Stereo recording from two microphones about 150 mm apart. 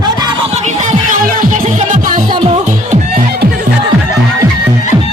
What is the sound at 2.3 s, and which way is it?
Music, 30° right (ahead or behind).